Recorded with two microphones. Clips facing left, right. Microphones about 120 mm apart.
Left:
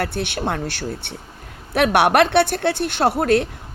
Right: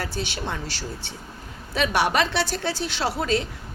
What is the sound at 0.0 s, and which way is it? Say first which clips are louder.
Speech: left 6 dB; 60° left (ahead or behind).